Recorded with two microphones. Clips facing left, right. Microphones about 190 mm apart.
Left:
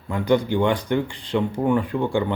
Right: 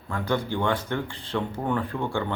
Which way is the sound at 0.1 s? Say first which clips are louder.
Left 7 dB; 15° left (ahead or behind).